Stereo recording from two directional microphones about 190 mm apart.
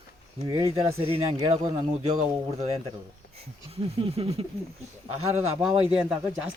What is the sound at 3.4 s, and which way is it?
Speech, 30° right (ahead or behind).